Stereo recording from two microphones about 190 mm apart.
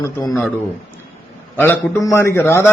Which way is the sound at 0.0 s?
20° left (ahead or behind).